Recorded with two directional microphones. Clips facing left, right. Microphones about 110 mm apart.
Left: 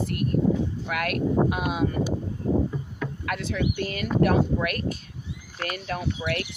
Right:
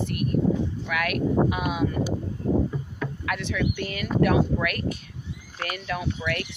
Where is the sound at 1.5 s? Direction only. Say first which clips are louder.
Even; 65° right (ahead or behind).